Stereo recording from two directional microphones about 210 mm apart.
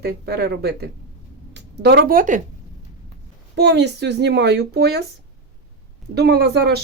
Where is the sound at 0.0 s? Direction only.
50° right (ahead or behind).